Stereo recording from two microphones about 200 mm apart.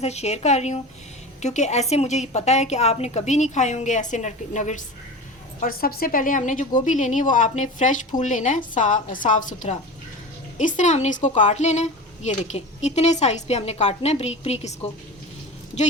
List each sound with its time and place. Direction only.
0.0 s a woman's voice: 35° left (ahead or behind)